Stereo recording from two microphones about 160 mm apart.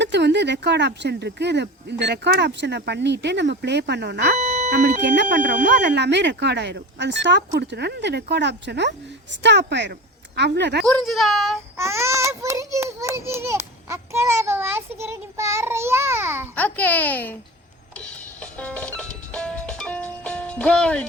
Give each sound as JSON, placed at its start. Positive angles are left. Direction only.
{"t": 0.0, "sound": "speech", "side_deg": -90}
{"t": 4.4, "sound": "a sound", "side_deg": -45}
{"t": 4.7, "sound": "speech", "side_deg": -90}
{"t": 5.5, "sound": "a woman's voice", "side_deg": -75}
{"t": 10.9, "sound": "a child's voice", "side_deg": 0}
{"t": 11.8, "sound": "a child's voice", "side_deg": -15}
{"t": 16.6, "sound": "a child's voice", "side_deg": 10}
{"t": 17.9, "sound": "music", "side_deg": 10}